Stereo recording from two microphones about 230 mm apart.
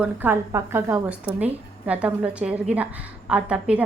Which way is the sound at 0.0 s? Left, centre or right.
Centre.